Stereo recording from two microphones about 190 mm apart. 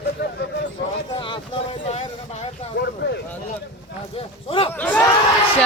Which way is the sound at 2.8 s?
60° left (ahead or behind).